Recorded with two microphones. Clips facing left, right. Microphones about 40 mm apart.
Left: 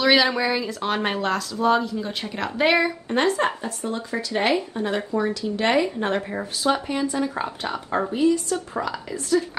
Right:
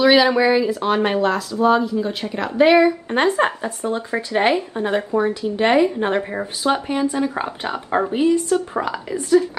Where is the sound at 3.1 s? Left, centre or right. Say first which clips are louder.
Right 3 dB; right.